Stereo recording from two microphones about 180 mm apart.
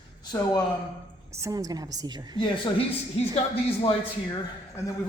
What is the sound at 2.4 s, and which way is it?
Speech, 30° left (ahead or behind).